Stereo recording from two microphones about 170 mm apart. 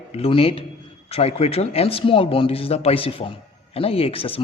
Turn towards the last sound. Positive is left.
turn(degrees=35)  # may be behind; listen again after turning